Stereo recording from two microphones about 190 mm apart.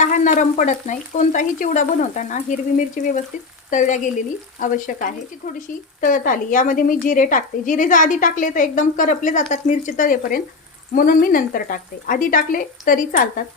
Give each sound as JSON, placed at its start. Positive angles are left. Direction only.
{"t": 0.0, "sound": "frying", "side_deg": 40}
{"t": 4.6, "sound": "speech", "side_deg": 45}